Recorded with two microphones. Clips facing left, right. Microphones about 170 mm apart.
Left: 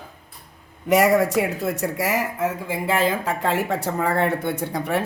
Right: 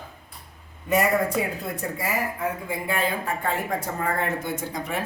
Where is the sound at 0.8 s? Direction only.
90° left; by 5.0 s 65° left (ahead or behind).